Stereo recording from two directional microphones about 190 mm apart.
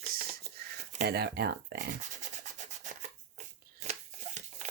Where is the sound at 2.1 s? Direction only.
40° right (ahead or behind).